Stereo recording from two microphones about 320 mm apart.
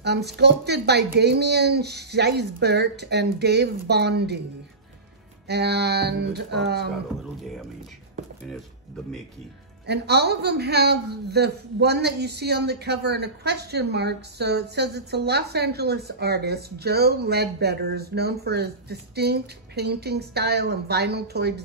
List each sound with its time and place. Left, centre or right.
0.0 s a man's voice: right
5.5 s a man's voice: right
9.8 s a man's voice: right